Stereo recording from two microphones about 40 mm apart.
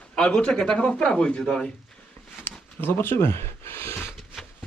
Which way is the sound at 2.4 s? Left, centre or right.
Left.